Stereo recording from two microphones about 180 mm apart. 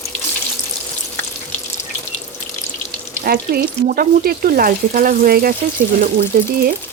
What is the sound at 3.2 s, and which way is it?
Speech, 55° right (ahead or behind).